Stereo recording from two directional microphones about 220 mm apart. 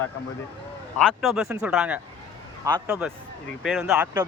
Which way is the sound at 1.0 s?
Centre (ahead or behind).